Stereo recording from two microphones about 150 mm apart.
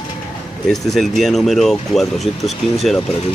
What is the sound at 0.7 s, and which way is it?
Speech, centre (ahead or behind).